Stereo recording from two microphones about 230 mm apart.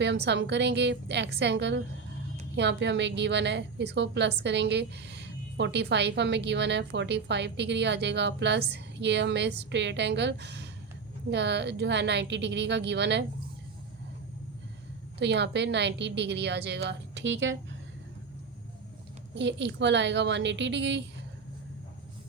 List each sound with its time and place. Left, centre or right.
0.0 s a woman's voice: right
15.2 s a woman's voice: right
19.3 s a woman's voice: right